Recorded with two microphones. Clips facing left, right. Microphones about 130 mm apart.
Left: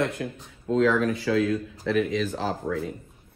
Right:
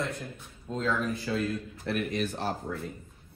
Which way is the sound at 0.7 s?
90° left.